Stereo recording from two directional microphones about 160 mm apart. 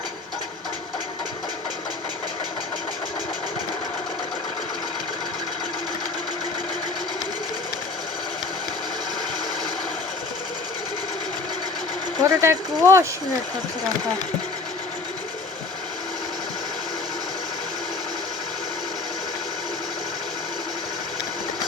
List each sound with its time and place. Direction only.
12.2 s speech: 15° right (ahead or behind)